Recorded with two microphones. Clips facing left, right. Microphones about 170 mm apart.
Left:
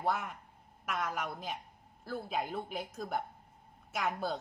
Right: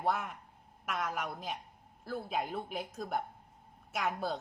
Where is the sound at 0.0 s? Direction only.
Centre (ahead or behind).